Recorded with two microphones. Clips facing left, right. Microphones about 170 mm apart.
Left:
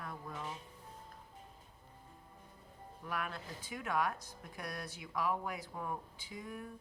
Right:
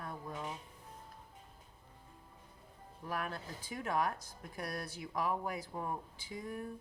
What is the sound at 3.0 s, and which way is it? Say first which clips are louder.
Speech: right 1 dB; 35° right (ahead or behind).